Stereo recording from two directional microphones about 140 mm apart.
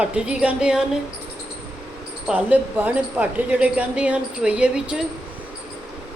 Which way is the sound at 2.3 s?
10° right (ahead or behind).